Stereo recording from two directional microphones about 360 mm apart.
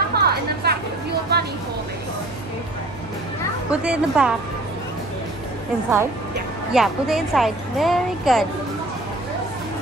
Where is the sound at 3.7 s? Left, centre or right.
Centre.